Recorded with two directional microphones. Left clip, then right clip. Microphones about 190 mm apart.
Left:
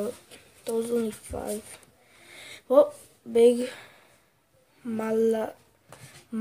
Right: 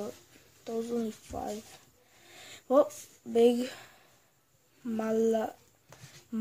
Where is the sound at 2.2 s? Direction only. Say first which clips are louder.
Left 4 dB; 20° right (ahead or behind).